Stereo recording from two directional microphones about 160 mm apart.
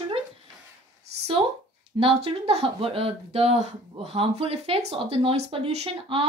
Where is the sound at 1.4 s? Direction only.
35° right (ahead or behind).